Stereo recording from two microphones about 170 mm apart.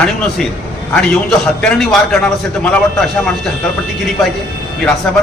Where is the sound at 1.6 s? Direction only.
5° left (ahead or behind).